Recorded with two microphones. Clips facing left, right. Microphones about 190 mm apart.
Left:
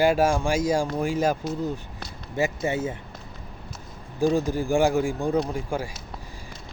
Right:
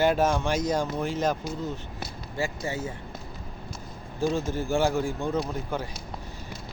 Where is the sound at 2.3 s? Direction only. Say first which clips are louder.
Left 6 dB; 20° left (ahead or behind).